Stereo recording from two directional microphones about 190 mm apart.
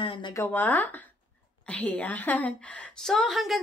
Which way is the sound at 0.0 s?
25° left (ahead or behind).